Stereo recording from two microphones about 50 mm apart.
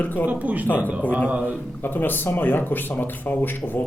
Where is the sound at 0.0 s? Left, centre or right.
Left.